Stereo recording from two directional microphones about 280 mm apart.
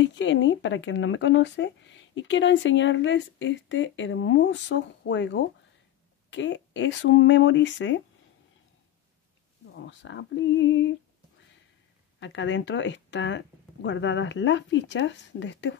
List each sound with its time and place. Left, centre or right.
0.0 s speech: left
9.8 s speech: left
12.2 s speech: left